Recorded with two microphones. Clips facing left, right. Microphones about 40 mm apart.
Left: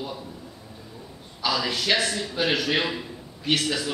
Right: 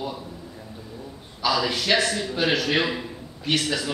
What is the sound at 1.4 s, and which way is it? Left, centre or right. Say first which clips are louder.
A man's voice: right 2 dB; centre.